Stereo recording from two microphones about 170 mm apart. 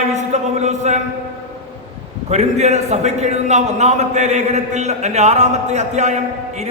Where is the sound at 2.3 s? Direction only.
40° right (ahead or behind).